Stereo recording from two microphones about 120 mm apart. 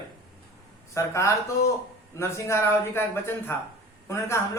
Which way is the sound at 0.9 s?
25° left (ahead or behind).